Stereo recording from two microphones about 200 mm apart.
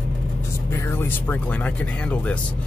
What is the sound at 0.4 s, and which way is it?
Speech, 15° left (ahead or behind).